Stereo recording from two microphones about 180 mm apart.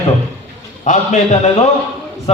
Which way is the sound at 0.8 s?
40° left (ahead or behind).